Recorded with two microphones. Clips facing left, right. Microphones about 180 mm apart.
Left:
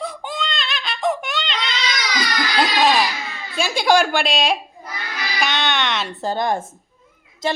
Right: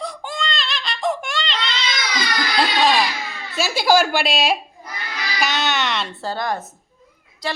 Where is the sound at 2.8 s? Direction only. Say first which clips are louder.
Left 1 dB; 5° left (ahead or behind).